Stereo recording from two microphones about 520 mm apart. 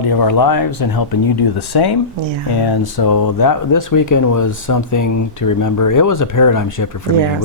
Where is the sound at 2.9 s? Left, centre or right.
Left.